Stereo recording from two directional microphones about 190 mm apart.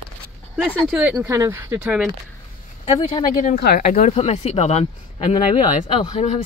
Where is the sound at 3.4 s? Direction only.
50° left (ahead or behind).